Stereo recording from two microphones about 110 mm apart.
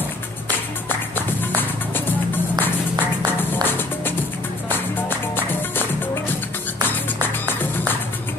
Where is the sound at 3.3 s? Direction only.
20° left (ahead or behind).